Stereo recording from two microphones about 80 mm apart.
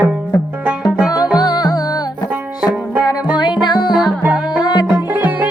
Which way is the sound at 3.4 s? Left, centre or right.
Left.